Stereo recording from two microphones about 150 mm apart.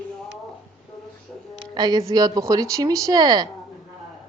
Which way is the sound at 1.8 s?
25° right (ahead or behind).